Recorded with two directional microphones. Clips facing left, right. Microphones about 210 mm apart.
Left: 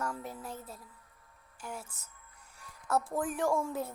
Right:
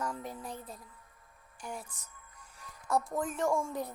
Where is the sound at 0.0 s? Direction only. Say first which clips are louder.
Even; 5° left (ahead or behind).